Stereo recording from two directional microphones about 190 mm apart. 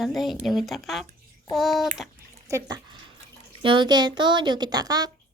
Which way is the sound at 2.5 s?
20° right (ahead or behind).